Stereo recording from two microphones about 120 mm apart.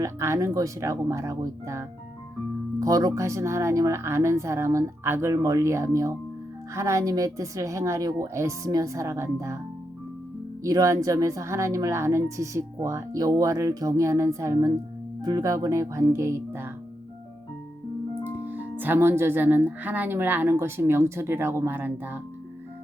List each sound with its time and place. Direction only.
0.0 s speech: 25° right (ahead or behind)
10.6 s speech: 25° right (ahead or behind)
18.2 s speech: 15° right (ahead or behind)